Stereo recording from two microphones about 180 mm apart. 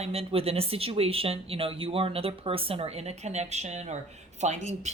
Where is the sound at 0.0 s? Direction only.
35° right (ahead or behind).